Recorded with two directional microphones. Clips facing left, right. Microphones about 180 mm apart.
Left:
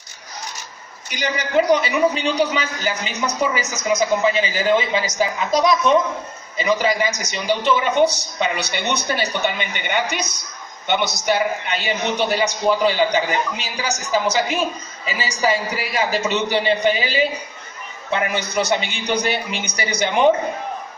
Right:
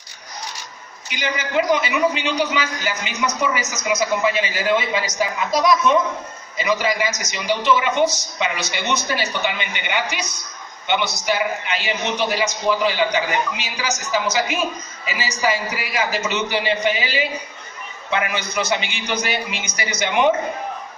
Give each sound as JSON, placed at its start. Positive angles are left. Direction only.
{"t": 1.0, "sound": "a man's voice", "side_deg": 40}